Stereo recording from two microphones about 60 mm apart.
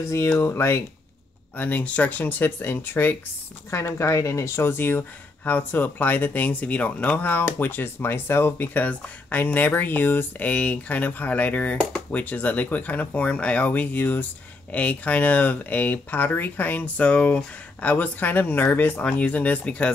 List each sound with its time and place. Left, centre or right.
0.0 s speech: left
0.4 s speech: left
1.6 s speech: left
3.7 s speech: left
10.5 s speech: left
19.0 s speech: left